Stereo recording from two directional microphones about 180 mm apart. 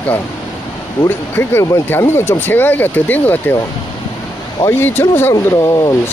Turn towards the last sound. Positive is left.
turn(degrees=15)  # may be behind; listen again after turning